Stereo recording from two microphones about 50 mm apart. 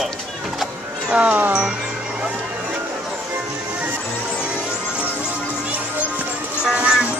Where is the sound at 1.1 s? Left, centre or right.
Right.